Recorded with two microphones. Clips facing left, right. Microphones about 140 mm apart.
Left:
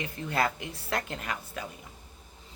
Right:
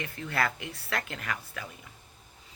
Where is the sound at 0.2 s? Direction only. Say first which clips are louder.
Left 2 dB; 25° left (ahead or behind).